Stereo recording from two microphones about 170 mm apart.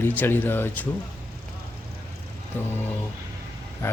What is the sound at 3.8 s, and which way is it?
Speech, 15° left (ahead or behind).